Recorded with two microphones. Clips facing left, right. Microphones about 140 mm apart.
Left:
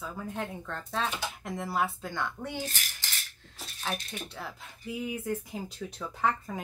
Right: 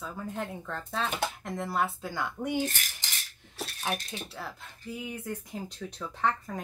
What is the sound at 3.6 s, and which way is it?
Speech, 70° right (ahead or behind).